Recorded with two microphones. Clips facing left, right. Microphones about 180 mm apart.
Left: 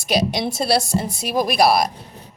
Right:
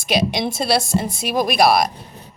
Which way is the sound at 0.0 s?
40° left (ahead or behind).